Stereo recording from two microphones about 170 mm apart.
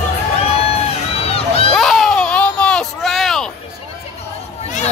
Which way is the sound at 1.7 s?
Centre (ahead or behind).